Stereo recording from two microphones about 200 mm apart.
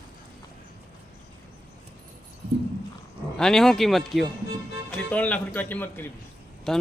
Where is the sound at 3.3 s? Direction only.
5° left (ahead or behind).